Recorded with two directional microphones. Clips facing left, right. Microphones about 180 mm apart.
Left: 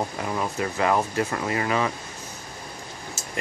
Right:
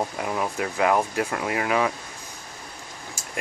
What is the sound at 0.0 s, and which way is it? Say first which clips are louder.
Speech: right 1 dB; 10° right (ahead or behind).